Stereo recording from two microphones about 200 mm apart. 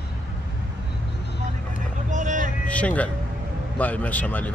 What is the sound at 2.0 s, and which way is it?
Vehicle, 40° right (ahead or behind).